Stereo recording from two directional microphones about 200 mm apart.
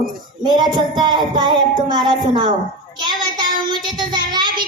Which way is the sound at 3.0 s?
20° right (ahead or behind).